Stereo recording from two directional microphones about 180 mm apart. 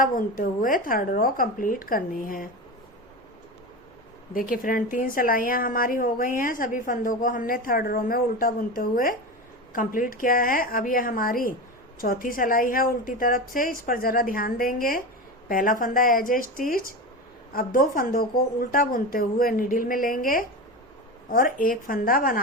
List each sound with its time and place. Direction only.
0.0 s a woman's voice: 50° left (ahead or behind)
4.4 s a woman's voice: 50° left (ahead or behind)